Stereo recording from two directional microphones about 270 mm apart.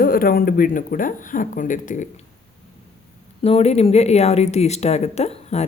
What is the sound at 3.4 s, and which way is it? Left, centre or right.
Speech, left.